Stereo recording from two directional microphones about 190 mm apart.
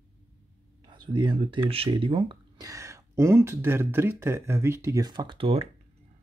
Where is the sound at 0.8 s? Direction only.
25° right (ahead or behind).